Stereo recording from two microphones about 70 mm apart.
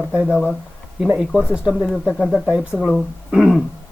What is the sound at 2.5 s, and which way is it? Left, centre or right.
Speech, centre.